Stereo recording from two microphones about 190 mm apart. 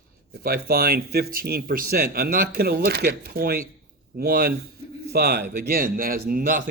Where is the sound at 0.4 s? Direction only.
55° right (ahead or behind).